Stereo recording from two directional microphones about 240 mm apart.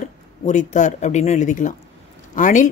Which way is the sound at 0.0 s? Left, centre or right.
Left.